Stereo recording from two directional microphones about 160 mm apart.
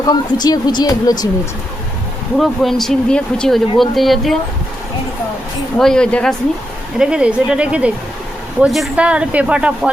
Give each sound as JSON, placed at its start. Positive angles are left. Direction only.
{"t": 0.0, "sound": "speech", "side_deg": 25}
{"t": 2.4, "sound": "speech", "side_deg": 0}
{"t": 5.7, "sound": "speech", "side_deg": 5}
{"t": 7.0, "sound": "a woman's voice", "side_deg": -5}